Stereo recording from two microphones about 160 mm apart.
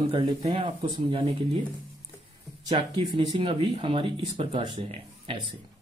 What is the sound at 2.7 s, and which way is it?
Speech, 30° right (ahead or behind).